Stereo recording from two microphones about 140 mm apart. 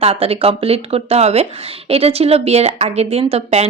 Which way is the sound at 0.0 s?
45° right (ahead or behind).